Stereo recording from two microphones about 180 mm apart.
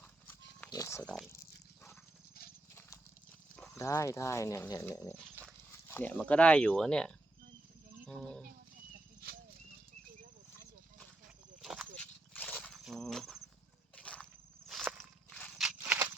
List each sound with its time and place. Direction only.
0.7 s pig: 15° left (ahead or behind)
1.0 s speech: 5° left (ahead or behind)
3.5 s a sound: 5° left (ahead or behind)
3.8 s speech: 15° left (ahead or behind)
5.4 s dog: 15° right (ahead or behind)
5.9 s speech: 10° left (ahead or behind)
11.6 s a sound: centre (ahead or behind)